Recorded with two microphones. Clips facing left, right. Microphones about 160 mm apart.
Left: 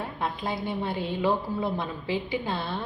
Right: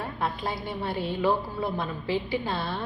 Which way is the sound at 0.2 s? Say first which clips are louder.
Left 1 dB; 20° left (ahead or behind).